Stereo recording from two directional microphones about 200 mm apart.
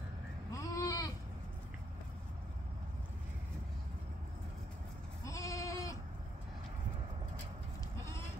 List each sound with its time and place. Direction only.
0.5 s goat: 15° left (ahead or behind)
5.2 s sheep: 15° left (ahead or behind)